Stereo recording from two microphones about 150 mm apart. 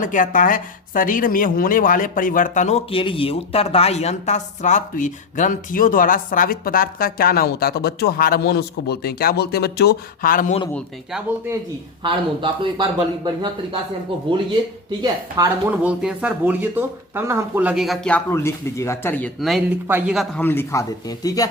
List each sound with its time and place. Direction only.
0.0 s speech: 60° left (ahead or behind)
11.1 s speech: 10° right (ahead or behind)
12.0 s speech: 35° right (ahead or behind)
14.8 s speech: 30° right (ahead or behind)
15.6 s speech: 10° right (ahead or behind)
18.3 s speech: 20° left (ahead or behind)
19.4 s speech: centre (ahead or behind)
19.9 s speech: 10° right (ahead or behind)
20.4 s speech: 15° left (ahead or behind)